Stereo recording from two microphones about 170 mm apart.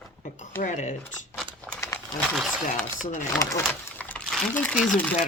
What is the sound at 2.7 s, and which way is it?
Speech, 45° left (ahead or behind).